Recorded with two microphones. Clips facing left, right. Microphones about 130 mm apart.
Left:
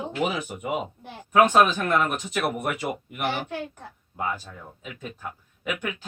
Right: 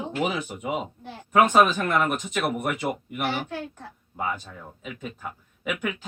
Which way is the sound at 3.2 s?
15° left (ahead or behind).